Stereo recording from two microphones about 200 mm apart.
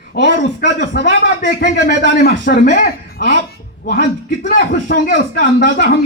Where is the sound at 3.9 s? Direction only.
40° left (ahead or behind).